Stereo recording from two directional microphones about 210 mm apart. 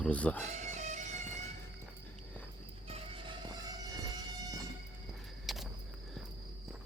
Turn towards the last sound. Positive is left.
turn(degrees=0)  # may be behind; listen again after turning